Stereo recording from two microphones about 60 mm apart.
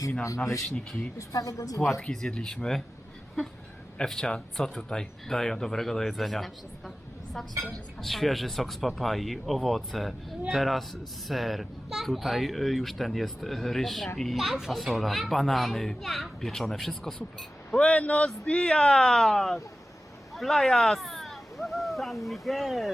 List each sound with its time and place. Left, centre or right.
1.3 s speech: left
2.0 s speech: centre
3.9 s speech: centre
7.9 s speech: centre
17.7 s speech: centre